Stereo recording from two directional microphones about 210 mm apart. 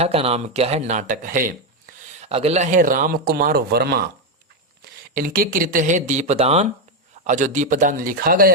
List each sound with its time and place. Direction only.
0.0 s speech: 30° right (ahead or behind); by 4.1 s 50° right (ahead or behind)
5.1 s speech: 40° right (ahead or behind)